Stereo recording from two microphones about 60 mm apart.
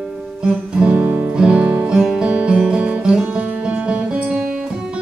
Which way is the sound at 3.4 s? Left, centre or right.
Right.